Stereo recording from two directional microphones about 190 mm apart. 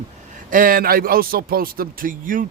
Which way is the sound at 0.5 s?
50° right (ahead or behind).